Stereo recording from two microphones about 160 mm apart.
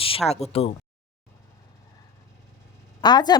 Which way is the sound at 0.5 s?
40° left (ahead or behind).